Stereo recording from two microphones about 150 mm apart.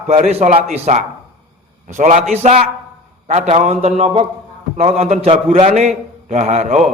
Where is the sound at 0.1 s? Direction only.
45° right (ahead or behind).